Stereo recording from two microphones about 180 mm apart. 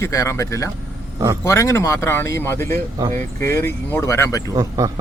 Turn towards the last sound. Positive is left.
turn(degrees=-20)  # may be behind; listen again after turning